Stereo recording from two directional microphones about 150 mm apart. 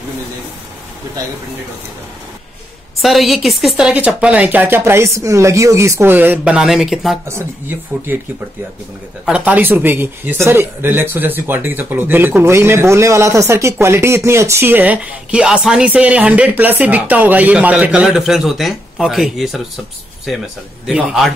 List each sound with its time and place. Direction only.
3.0 s speech: centre (ahead or behind)
7.2 s speech: 15° right (ahead or behind)
9.2 s speech: 10° right (ahead or behind)
20.8 s a man's voice: centre (ahead or behind)